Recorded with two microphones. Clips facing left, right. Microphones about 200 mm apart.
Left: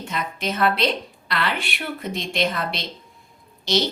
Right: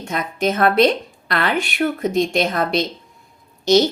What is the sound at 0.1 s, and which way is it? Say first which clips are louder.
A woman's voice: right 7 dB; 45° right (ahead or behind).